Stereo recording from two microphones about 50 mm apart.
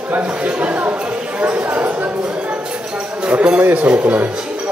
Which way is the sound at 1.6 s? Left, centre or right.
Right.